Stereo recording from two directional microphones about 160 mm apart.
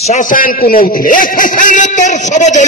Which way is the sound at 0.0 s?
50° left (ahead or behind).